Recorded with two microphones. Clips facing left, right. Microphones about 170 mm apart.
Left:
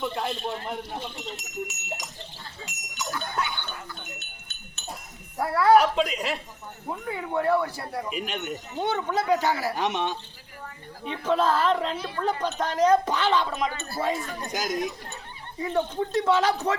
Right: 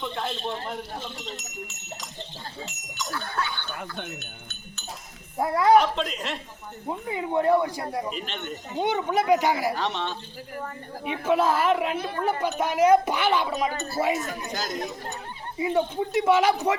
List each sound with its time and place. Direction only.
0.0 s speech: 5° left (ahead or behind)
2.6 s goat: 15° left (ahead or behind)
5.4 s speech: 15° right (ahead or behind)
5.7 s speech: 10° left (ahead or behind)
6.9 s speech: 20° right (ahead or behind)
8.1 s speech: 10° left (ahead or behind)
8.7 s speech: 15° right (ahead or behind)
9.7 s speech: 15° left (ahead or behind)
11.0 s speech: 10° right (ahead or behind)
11.9 s speech: 50° right (ahead or behind)
12.2 s speech: 10° right (ahead or behind)
14.0 s speech: 25° right (ahead or behind)
14.5 s speech: 20° left (ahead or behind)
15.5 s speech: 10° right (ahead or behind)